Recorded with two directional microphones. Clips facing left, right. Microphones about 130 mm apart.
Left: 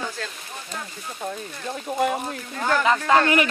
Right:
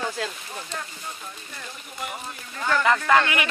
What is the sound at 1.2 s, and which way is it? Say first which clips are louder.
Speech: left 9 dB; 75° left (ahead or behind).